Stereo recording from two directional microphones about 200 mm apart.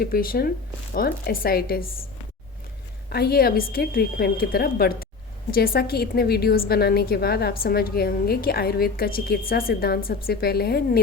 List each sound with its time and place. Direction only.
0.0 s a woman's voice: 45° left (ahead or behind)
3.1 s a woman's voice: 50° left (ahead or behind)